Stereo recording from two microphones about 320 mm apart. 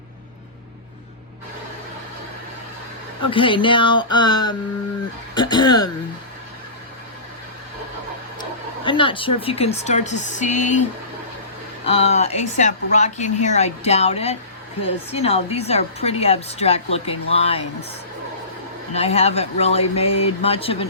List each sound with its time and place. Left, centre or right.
3.2 s speech: centre
8.8 s a woman's voice: centre
11.9 s a woman's voice: centre
18.9 s a woman's voice: centre